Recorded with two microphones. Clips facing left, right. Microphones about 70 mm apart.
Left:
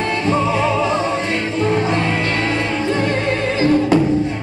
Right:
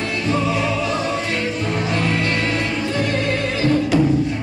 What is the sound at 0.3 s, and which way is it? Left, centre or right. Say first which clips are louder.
Music: left 3 dB; left.